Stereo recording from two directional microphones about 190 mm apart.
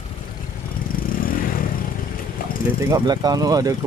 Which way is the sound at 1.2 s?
50° left (ahead or behind).